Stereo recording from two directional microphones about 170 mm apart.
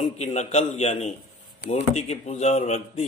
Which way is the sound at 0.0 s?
40° left (ahead or behind).